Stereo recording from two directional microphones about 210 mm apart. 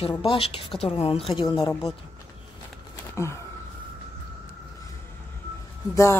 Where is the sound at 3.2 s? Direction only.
15° left (ahead or behind).